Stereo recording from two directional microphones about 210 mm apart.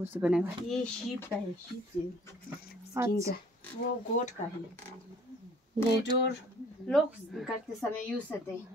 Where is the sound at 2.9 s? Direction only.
15° right (ahead or behind).